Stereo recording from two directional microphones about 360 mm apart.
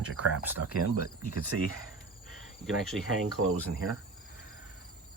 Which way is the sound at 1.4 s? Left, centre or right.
Right.